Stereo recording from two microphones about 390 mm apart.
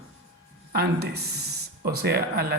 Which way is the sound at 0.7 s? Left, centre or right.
Right.